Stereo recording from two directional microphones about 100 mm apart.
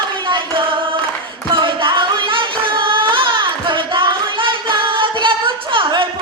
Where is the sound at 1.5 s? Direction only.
55° right (ahead or behind).